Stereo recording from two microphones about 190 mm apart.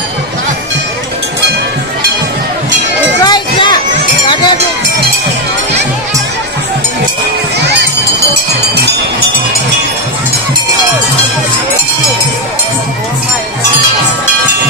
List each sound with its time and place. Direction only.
3.3 s run: 25° left (ahead or behind)